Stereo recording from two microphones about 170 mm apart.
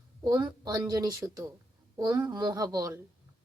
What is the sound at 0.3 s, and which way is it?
A woman's voice, 20° right (ahead or behind).